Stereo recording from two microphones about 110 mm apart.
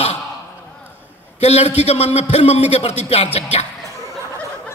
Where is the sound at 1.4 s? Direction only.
70° left (ahead or behind).